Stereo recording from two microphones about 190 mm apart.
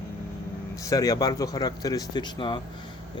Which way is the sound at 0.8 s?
20° left (ahead or behind).